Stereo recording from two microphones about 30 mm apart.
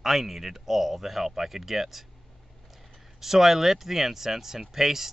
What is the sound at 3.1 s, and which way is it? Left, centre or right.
Speech, centre.